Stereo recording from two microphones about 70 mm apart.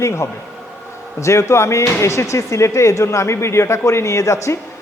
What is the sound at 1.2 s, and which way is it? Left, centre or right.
Speech, left.